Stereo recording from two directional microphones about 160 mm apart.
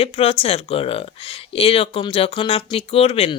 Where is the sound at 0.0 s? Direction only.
35° left (ahead or behind).